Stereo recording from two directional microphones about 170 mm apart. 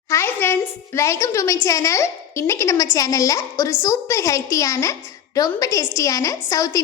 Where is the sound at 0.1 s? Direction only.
15° left (ahead or behind).